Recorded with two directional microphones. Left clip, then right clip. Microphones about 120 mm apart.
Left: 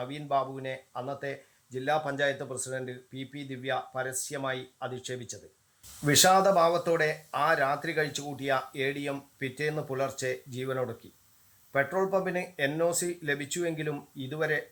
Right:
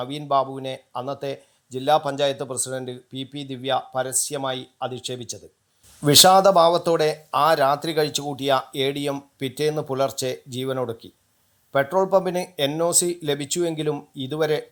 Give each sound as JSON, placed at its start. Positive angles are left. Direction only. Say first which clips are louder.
{"t": 0.0, "sound": "speech", "louder": "right 8 dB", "side_deg": -30}